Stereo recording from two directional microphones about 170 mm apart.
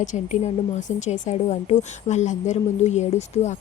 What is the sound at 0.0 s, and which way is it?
Speech, 45° left (ahead or behind).